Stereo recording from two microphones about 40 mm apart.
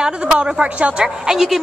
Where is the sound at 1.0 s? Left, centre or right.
Centre.